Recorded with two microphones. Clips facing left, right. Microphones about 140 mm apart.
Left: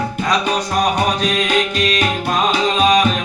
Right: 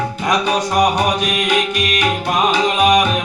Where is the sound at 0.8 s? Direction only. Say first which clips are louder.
Right 2 dB; 15° right (ahead or behind).